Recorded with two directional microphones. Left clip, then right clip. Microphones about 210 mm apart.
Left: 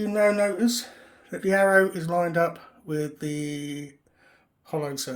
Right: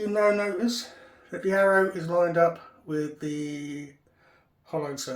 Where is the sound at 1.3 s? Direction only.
40° left (ahead or behind).